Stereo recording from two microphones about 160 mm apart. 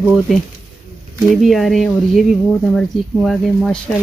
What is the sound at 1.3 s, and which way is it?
Speech, centre (ahead or behind).